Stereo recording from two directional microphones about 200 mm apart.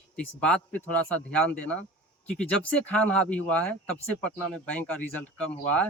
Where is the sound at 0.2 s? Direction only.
5° left (ahead or behind).